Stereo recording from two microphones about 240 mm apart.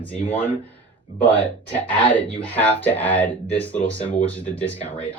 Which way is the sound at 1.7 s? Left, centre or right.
Centre.